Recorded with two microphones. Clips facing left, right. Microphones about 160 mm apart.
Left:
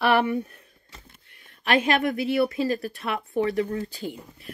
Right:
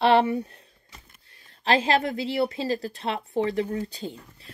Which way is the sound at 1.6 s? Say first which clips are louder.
Even; 30° right (ahead or behind).